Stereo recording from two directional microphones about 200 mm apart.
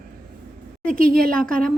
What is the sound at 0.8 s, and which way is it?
Speech, 45° right (ahead or behind).